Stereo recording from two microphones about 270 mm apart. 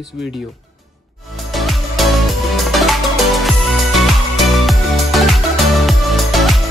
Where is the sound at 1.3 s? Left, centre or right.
Centre.